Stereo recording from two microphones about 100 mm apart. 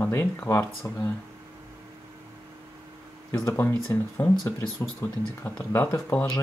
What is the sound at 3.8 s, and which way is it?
Speech, 25° left (ahead or behind).